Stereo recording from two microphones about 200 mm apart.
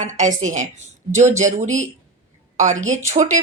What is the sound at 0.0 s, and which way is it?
Speech, 40° right (ahead or behind).